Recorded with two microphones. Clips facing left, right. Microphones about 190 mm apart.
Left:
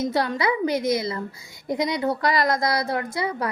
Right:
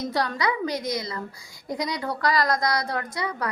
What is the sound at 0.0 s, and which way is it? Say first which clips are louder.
A woman's voice: left 3 dB; 25° left (ahead or behind).